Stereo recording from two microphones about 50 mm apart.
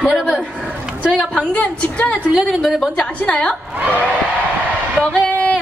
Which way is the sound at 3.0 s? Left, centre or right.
Left.